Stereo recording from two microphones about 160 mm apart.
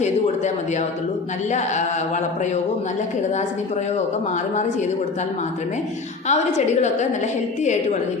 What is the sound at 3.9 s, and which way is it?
Speech, 50° left (ahead or behind).